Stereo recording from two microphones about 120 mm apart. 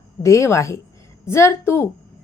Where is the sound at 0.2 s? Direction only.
25° left (ahead or behind).